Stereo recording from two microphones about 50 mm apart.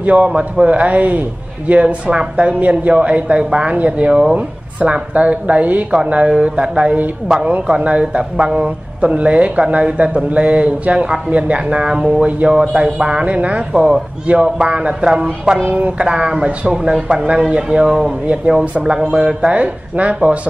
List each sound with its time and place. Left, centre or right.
0.0 s speech: right
15.6 s a sound: right
16.0 s speech: centre
18.8 s speech: centre